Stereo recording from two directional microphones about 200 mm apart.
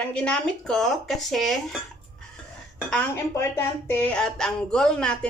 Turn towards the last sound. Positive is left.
turn(degrees=5)  # may be behind; listen again after turning